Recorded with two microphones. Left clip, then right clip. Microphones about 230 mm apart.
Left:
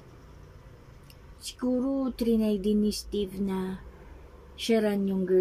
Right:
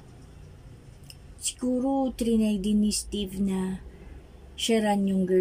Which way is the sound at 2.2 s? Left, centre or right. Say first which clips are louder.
Even; right.